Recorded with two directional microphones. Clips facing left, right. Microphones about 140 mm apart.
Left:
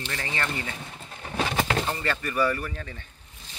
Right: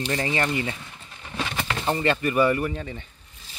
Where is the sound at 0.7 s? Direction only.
40° left (ahead or behind).